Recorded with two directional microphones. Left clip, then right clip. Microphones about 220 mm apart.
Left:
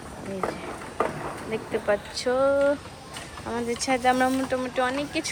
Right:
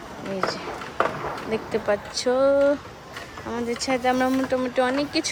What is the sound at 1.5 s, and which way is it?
Speech, 5° right (ahead or behind).